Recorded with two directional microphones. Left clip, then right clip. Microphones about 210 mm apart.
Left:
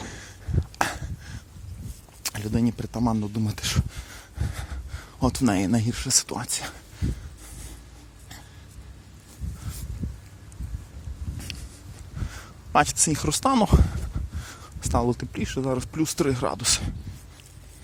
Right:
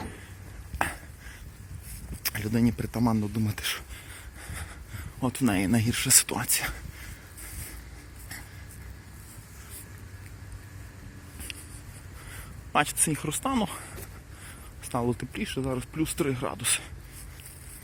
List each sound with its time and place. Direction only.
0.8 s a sound: 25° left (ahead or behind)
2.2 s speech: 15° left (ahead or behind)
12.7 s speech: 25° left (ahead or behind)